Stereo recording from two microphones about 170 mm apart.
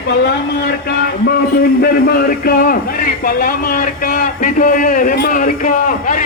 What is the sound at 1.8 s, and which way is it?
A man's voice, 65° left (ahead or behind).